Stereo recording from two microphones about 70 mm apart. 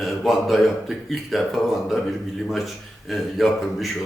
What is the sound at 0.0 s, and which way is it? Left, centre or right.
Speech, centre.